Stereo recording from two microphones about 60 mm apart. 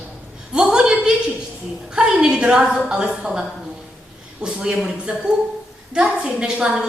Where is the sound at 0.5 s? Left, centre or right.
Centre.